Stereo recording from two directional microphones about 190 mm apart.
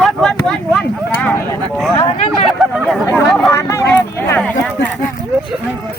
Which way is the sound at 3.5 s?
15° left (ahead or behind).